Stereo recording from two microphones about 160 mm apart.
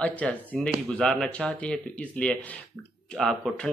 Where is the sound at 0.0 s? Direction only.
10° left (ahead or behind).